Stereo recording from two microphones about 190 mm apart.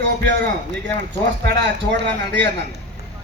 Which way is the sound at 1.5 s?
65° right (ahead or behind).